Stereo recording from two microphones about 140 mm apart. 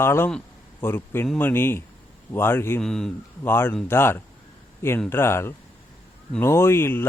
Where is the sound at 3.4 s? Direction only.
15° left (ahead or behind).